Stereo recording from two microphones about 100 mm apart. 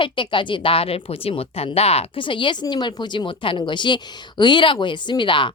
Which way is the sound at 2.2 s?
55° left (ahead or behind).